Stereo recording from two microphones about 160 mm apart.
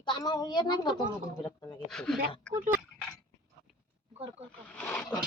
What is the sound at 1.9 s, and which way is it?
Speech, 5° left (ahead or behind).